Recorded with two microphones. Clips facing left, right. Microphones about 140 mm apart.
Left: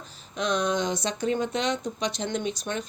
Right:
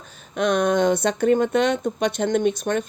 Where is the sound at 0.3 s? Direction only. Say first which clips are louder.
Right 7 dB; 55° right (ahead or behind).